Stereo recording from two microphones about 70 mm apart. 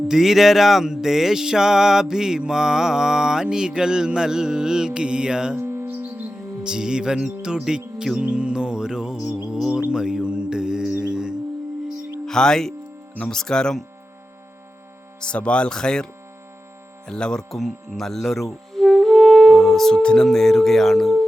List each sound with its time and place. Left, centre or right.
0.1 s mantra: centre
5.8 s music: right
6.7 s mantra: centre
9.5 s music: centre
12.2 s speech: centre
15.2 s speech: centre
17.1 s speech: centre